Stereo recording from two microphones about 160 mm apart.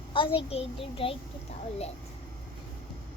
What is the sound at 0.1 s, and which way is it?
A child's voice, 35° left (ahead or behind).